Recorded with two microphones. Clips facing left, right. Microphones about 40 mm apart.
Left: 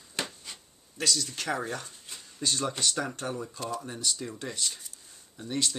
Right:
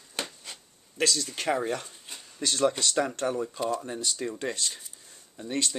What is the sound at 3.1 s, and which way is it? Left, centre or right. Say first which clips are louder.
Speech: right 6 dB; right.